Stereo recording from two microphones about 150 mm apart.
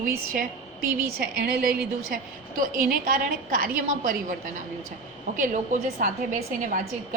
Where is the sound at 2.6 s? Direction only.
65° right (ahead or behind).